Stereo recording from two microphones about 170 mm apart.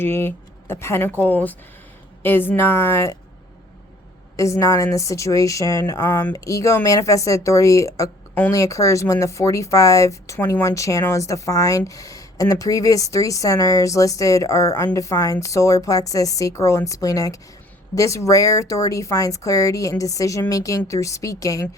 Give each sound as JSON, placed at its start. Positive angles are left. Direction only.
{"t": 0.0, "sound": "a woman's voice", "side_deg": 15}
{"t": 4.4, "sound": "a woman's voice", "side_deg": 20}